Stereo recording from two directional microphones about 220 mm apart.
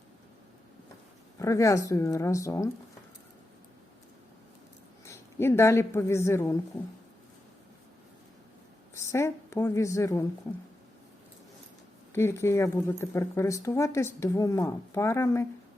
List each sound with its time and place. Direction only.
1.4 s speech: 15° left (ahead or behind)
5.0 s a woman's voice: 10° left (ahead or behind)
9.0 s a woman's voice: 10° left (ahead or behind)
12.1 s speech: 10° left (ahead or behind)